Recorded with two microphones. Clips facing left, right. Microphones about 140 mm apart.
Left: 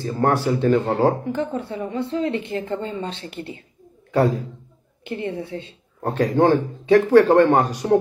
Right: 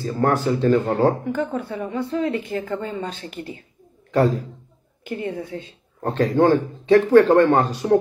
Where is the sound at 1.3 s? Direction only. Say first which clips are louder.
Even; 30° left (ahead or behind).